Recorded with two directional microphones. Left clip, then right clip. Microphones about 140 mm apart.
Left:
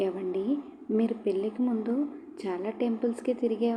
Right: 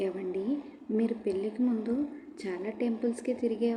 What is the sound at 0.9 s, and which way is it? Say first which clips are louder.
A woman's voice: left 2 dB; 10° left (ahead or behind).